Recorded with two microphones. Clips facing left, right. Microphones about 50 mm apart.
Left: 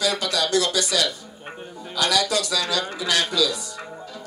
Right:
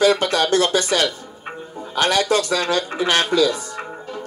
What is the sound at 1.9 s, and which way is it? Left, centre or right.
Speech, right.